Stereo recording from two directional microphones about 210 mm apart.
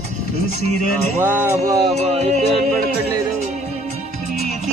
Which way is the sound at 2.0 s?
30° right (ahead or behind).